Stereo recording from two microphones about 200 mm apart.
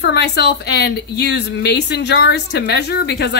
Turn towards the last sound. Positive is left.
turn(degrees=55)  # may be behind; listen again after turning